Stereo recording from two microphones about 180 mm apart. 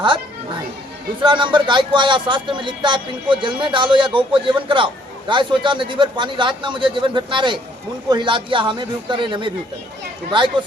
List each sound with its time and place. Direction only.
1.2 s speech: 25° right (ahead or behind)